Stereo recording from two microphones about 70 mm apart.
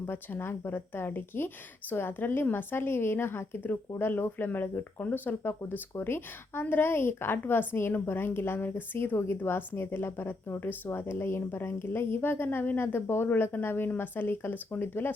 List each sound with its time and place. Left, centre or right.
0.0 s a woman's voice: left